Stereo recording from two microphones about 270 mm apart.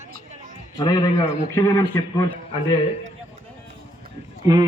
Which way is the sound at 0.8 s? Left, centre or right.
Centre.